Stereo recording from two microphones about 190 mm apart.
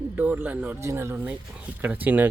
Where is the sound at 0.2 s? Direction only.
10° right (ahead or behind).